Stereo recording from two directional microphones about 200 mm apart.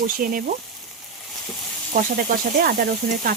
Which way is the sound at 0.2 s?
45° right (ahead or behind).